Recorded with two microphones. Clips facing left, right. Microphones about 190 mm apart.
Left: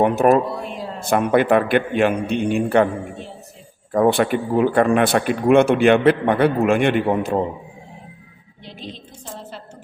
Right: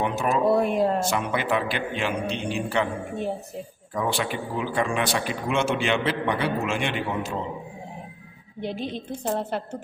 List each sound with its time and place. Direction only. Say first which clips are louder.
0.0 s a man's voice: left 9 dB; 55° left (ahead or behind)
0.4 s a sound: right 8 dB; 55° right (ahead or behind)
0.9 s a man's voice: left 8 dB; 55° left (ahead or behind)
3.9 s a man's voice: left 10 dB; 55° left (ahead or behind)
8.6 s a woman's voice: right 7 dB; 55° right (ahead or behind)